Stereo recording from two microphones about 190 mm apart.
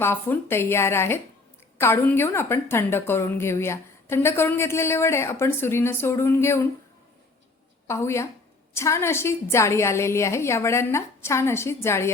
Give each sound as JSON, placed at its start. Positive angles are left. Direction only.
{"t": 0.0, "sound": "a woman's voice", "side_deg": 10}
{"t": 7.9, "sound": "a woman's voice", "side_deg": 15}